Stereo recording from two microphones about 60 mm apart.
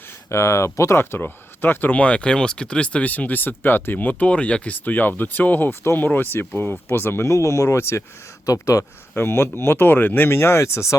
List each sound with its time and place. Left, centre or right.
0.3 s speech: left
2.0 s speech: left
7.3 s speech: left
7.8 s speech: left
8.4 s speech: left
9.1 s speech: left